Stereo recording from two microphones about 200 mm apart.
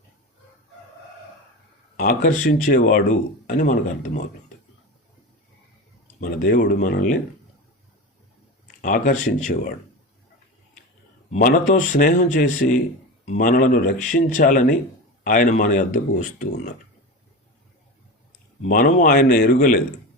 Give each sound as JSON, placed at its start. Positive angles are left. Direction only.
{"t": 2.0, "sound": "speech", "side_deg": 45}
{"t": 6.1, "sound": "speech", "side_deg": 45}
{"t": 8.8, "sound": "speech", "side_deg": 40}
{"t": 11.3, "sound": "speech", "side_deg": 45}
{"t": 18.7, "sound": "speech", "side_deg": 45}